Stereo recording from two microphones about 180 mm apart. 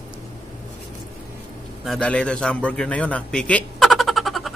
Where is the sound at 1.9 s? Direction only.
5° left (ahead or behind).